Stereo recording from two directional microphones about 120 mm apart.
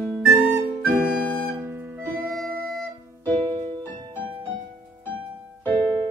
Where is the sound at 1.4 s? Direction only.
20° right (ahead or behind).